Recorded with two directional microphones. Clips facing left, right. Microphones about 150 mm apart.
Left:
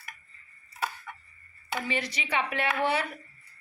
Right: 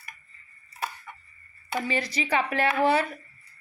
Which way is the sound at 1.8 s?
35° right (ahead or behind).